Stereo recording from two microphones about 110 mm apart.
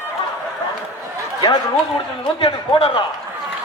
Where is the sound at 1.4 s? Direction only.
40° left (ahead or behind).